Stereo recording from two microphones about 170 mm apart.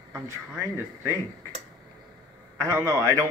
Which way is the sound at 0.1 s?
15° right (ahead or behind).